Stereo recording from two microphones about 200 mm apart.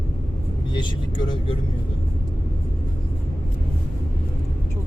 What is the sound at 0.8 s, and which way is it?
Speech, 25° left (ahead or behind).